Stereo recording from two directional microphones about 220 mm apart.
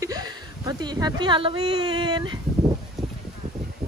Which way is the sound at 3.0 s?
Centre (ahead or behind).